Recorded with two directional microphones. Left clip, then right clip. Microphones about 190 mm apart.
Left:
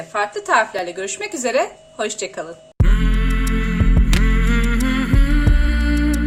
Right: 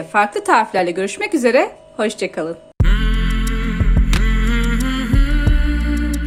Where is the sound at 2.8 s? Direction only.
Centre (ahead or behind).